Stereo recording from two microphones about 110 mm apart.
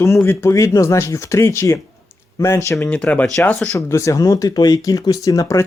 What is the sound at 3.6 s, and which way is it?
Speech, 25° left (ahead or behind).